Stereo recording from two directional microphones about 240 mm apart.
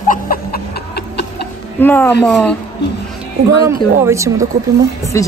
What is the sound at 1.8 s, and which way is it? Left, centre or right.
Speech, centre.